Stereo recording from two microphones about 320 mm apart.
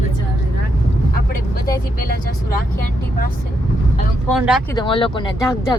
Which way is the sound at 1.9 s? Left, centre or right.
Left.